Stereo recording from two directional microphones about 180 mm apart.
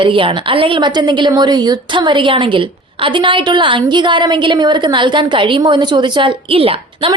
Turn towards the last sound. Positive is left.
turn(degrees=-30)  # may be behind; listen again after turning